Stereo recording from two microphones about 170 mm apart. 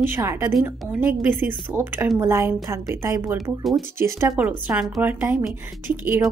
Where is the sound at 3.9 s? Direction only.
15° right (ahead or behind).